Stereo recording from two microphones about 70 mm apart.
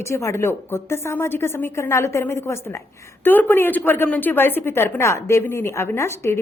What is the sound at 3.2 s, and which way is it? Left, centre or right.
A woman's voice, left.